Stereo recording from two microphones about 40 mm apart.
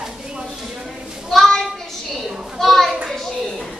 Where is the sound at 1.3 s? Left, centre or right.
Centre.